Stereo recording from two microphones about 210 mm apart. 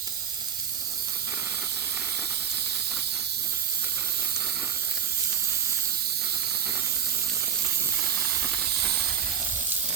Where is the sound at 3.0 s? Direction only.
50° right (ahead or behind).